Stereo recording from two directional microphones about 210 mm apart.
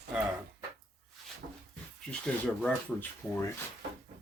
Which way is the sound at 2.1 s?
5° left (ahead or behind).